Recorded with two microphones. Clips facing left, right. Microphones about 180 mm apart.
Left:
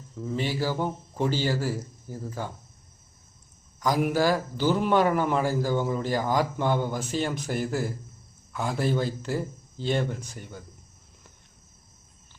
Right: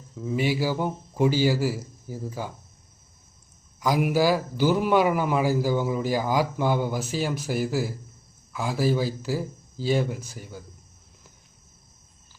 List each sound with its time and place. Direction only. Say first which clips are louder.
0.2 s a man's voice: right 3 dB; 10° right (ahead or behind)
3.8 s a man's voice: right 2 dB; 10° right (ahead or behind)